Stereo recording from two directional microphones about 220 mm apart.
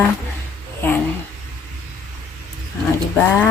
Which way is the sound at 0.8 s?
10° left (ahead or behind).